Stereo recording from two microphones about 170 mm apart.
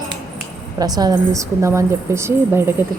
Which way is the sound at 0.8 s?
20° right (ahead or behind).